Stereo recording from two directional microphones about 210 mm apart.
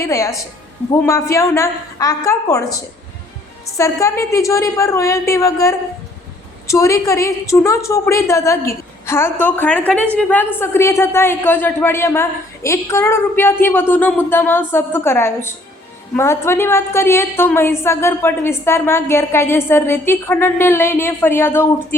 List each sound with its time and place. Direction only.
0.0 s a woman's voice: 15° left (ahead or behind)
3.8 s a woman's voice: 15° left (ahead or behind)